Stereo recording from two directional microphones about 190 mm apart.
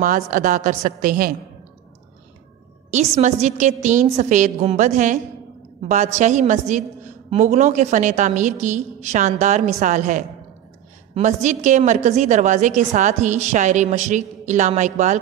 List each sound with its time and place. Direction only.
0.0 s a woman's voice: 45° right (ahead or behind)
2.9 s a woman's voice: 35° right (ahead or behind)